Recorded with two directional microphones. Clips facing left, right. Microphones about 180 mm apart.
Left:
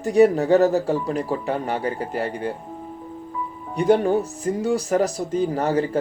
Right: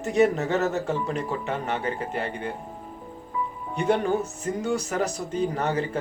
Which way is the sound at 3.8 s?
35° left (ahead or behind).